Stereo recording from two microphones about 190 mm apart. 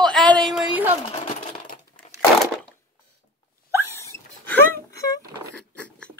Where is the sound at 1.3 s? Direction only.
40° left (ahead or behind).